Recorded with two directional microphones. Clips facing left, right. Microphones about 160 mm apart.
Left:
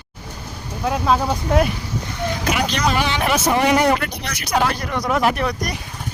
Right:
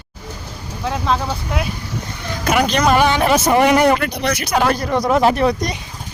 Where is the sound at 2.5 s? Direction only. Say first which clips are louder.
Right 7 dB; 50° right (ahead or behind).